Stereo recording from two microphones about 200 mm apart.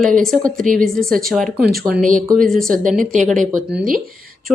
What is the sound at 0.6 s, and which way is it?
Speech, 40° right (ahead or behind).